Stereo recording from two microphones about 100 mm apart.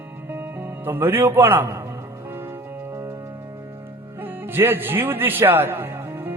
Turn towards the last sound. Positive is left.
turn(degrees=-20)  # may be behind; listen again after turning